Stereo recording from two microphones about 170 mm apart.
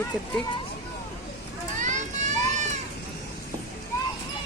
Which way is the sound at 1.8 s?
45° right (ahead or behind).